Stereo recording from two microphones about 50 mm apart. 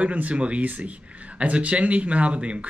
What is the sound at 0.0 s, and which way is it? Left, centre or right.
Speech, right.